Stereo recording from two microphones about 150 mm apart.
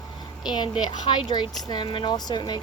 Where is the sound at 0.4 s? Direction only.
30° left (ahead or behind).